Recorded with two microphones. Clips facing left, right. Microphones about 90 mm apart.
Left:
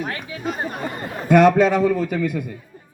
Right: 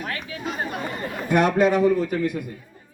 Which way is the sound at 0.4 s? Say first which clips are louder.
Left 3 dB; 40° left (ahead or behind).